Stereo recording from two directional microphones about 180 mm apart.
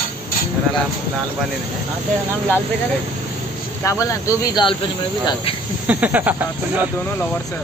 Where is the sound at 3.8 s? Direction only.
15° left (ahead or behind).